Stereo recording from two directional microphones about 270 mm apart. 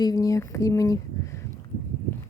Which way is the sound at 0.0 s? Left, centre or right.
Centre.